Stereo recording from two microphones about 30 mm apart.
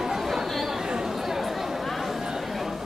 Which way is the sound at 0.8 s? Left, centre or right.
Right.